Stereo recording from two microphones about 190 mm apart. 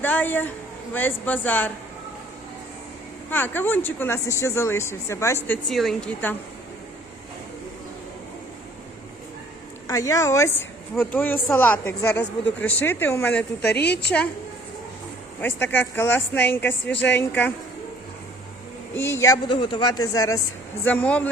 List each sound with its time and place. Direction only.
0.0 s a sound: 10° left (ahead or behind)
0.9 s speech: 10° left (ahead or behind)
3.2 s speech: 10° left (ahead or behind)
5.6 s speech: centre (ahead or behind)
9.8 s speech: 15° left (ahead or behind)
13.7 s a woman's voice: 60° left (ahead or behind)
15.4 s speech: 10° left (ahead or behind)
18.9 s speech: 15° left (ahead or behind)
20.8 s speech: 5° left (ahead or behind)